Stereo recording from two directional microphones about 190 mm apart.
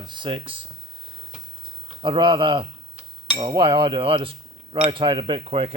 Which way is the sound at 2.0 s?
25° right (ahead or behind).